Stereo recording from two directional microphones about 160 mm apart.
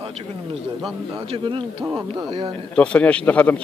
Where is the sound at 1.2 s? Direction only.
30° right (ahead or behind).